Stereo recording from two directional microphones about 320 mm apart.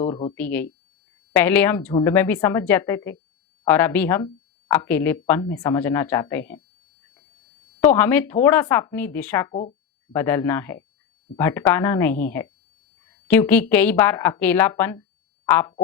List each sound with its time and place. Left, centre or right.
0.1 s speech: centre
0.3 s speech: centre
7.8 s speech: centre